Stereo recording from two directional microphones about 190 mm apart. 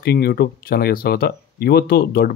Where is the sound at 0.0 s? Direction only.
55° left (ahead or behind).